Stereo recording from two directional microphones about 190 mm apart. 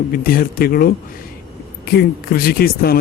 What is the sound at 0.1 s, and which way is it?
Speech, 50° left (ahead or behind).